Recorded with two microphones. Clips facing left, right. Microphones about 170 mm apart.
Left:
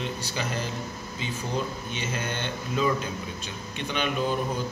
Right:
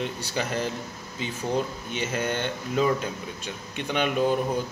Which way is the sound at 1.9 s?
55° right (ahead or behind).